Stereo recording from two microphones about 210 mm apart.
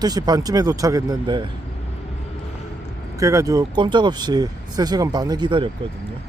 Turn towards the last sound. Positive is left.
turn(degrees=-20)  # may be behind; listen again after turning